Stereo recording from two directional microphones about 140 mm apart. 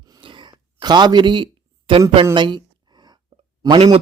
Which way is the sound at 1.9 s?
40° right (ahead or behind).